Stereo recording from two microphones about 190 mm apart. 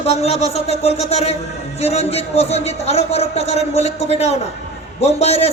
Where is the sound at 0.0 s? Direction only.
35° left (ahead or behind).